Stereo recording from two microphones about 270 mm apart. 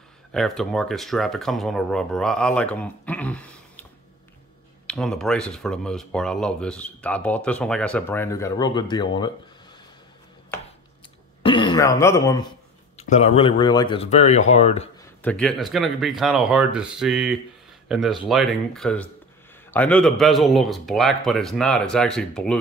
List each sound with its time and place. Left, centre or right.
0.3 s speech: centre
4.8 s speech: centre
11.4 s speech: centre
12.9 s speech: left
15.2 s speech: centre